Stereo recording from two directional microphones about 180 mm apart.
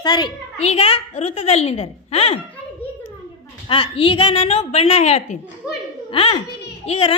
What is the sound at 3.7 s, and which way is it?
A woman's voice, 30° left (ahead or behind).